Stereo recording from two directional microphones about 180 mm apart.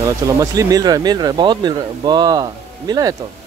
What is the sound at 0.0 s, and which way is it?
Speech, 20° right (ahead or behind).